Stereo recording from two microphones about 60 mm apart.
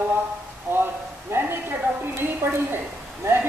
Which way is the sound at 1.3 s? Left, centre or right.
Right.